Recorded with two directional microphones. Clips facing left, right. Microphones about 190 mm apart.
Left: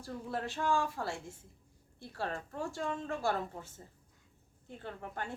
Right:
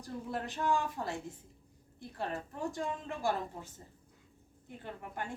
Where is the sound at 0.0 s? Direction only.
20° right (ahead or behind).